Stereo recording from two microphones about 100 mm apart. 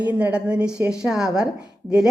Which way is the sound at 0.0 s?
15° right (ahead or behind).